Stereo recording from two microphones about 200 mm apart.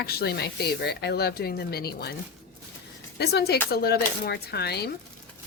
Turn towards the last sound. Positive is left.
turn(degrees=55)  # may be behind; listen again after turning